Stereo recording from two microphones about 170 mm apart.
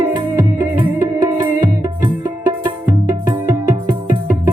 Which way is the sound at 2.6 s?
25° right (ahead or behind).